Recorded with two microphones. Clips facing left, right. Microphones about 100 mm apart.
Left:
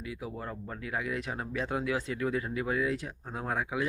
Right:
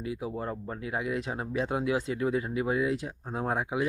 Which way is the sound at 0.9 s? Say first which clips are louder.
Right 2 dB; 25° right (ahead or behind).